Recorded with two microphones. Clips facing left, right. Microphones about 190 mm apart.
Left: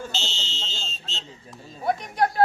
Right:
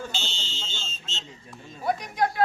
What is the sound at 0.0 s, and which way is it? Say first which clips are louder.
Fire alarm: left 1 dB; centre (ahead or behind).